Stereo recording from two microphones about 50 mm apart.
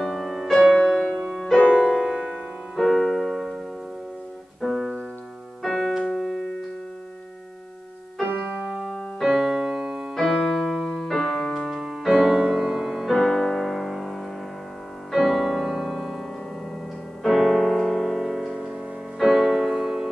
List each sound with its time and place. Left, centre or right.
0.0 s music: centre
1.9 s music: centre
2.2 s piano: centre
4.6 s piano: centre
5.6 s keyboard: centre
8.2 s piano: right
8.6 s keyboard: centre
9.2 s keyboard: centre
11.6 s music: centre
13.2 s music: centre